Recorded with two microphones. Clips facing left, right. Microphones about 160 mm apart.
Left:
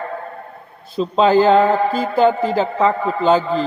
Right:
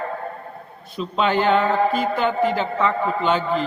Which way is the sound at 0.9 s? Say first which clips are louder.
Left 7 dB; 35° left (ahead or behind).